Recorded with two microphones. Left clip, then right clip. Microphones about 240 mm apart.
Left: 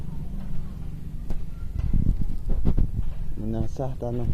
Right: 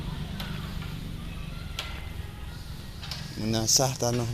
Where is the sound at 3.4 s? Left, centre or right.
Right.